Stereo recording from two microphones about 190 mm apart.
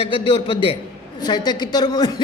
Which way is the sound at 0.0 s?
25° left (ahead or behind).